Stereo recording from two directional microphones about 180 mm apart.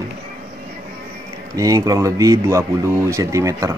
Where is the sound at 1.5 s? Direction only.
20° right (ahead or behind).